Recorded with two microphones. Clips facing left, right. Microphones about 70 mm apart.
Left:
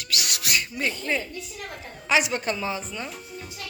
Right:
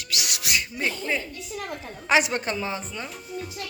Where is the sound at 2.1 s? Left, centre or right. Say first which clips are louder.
Right 1 dB; right.